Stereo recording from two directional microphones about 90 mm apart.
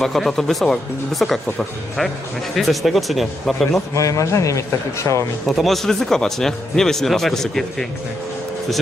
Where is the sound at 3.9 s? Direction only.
35° left (ahead or behind).